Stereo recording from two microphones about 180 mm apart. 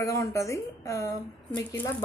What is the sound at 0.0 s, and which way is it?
A woman's voice, 15° left (ahead or behind).